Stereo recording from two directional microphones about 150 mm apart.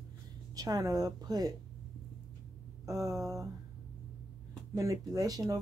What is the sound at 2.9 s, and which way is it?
Speech, 20° right (ahead or behind).